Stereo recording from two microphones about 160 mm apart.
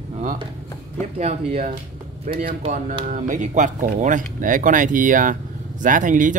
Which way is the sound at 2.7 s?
55° right (ahead or behind).